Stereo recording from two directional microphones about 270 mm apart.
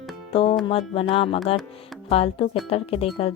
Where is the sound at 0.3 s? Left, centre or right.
Left.